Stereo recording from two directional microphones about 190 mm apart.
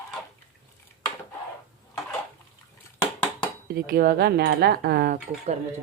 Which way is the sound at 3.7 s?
55° right (ahead or behind).